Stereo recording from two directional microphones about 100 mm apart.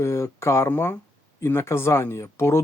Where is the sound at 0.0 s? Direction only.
30° left (ahead or behind).